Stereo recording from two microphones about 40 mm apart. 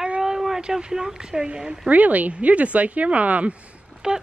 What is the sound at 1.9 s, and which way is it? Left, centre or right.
Speech, right.